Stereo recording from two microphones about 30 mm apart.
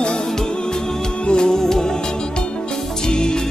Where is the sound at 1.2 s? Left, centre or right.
Left.